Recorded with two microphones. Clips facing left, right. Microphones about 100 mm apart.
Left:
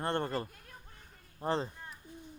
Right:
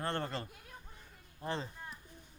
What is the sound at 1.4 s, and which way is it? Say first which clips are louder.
Speech: left 6 dB; 35° left (ahead or behind).